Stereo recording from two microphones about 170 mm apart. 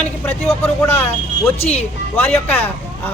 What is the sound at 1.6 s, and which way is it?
Speech, 40° left (ahead or behind).